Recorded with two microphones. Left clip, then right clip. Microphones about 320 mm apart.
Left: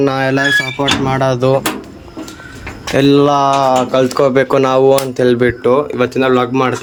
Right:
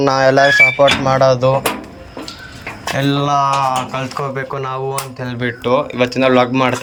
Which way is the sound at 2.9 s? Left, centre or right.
Centre.